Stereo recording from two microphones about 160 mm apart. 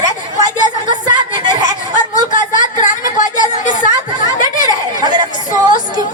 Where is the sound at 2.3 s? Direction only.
55° left (ahead or behind).